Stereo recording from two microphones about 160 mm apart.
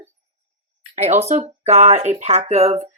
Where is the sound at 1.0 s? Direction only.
40° right (ahead or behind).